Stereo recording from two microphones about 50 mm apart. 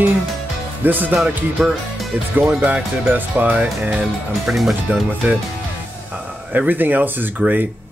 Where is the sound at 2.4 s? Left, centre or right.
Right.